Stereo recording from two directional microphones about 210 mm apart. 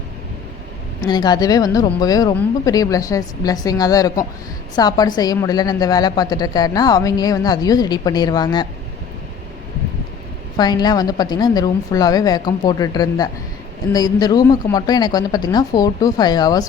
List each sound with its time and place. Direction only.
1.0 s a woman's voice: 20° left (ahead or behind)
10.6 s a woman's voice: 20° left (ahead or behind)